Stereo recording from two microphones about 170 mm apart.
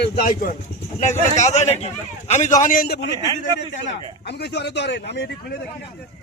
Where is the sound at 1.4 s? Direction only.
40° left (ahead or behind); by 3.1 s 70° left (ahead or behind).